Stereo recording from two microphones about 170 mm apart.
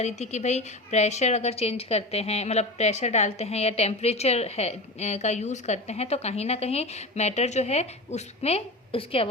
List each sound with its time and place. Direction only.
0.0 s a woman's voice: 40° left (ahead or behind)